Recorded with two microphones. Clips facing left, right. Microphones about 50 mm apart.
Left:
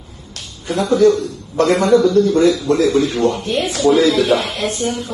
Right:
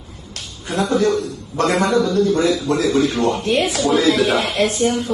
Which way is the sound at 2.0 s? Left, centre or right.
Left.